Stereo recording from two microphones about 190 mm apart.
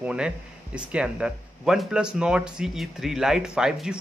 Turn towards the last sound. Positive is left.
turn(degrees=-5)  # may be behind; listen again after turning